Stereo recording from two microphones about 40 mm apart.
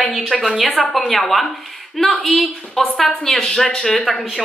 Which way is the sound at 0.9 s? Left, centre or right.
Centre.